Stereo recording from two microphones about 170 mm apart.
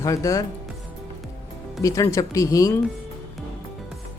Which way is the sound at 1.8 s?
20° left (ahead or behind).